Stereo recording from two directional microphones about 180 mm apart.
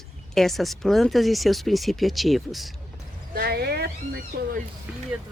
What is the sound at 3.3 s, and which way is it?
Speech, 60° right (ahead or behind).